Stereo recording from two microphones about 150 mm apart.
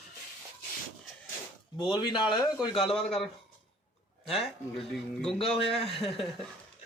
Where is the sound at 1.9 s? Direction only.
30° left (ahead or behind).